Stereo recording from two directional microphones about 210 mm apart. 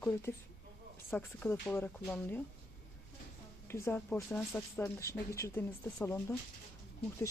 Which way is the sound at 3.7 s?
10° left (ahead or behind).